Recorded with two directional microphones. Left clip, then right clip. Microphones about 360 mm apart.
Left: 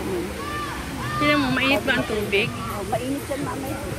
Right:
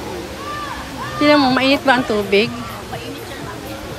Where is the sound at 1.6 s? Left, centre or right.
Centre.